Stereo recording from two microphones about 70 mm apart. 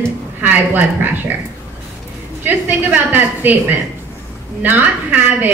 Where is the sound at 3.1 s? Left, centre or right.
Right.